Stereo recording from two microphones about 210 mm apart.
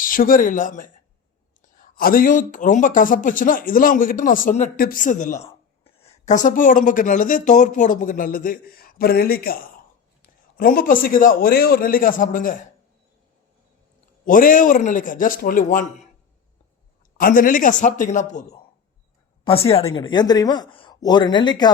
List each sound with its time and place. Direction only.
0.0 s speech: 40° left (ahead or behind)
10.6 s a man's voice: 45° left (ahead or behind)
14.3 s speech: 40° left (ahead or behind)
17.2 s speech: 40° left (ahead or behind); by 21.7 s 20° left (ahead or behind)